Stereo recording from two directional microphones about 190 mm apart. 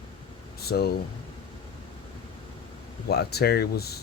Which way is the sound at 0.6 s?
55° left (ahead or behind).